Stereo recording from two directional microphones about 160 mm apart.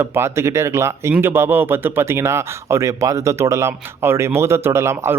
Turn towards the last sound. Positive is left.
turn(degrees=-15)  # may be behind; listen again after turning